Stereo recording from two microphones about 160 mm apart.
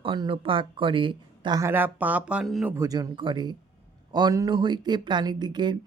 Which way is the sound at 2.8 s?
20° right (ahead or behind).